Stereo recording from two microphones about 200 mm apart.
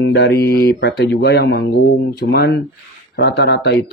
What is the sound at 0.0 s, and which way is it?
Speech, 55° left (ahead or behind).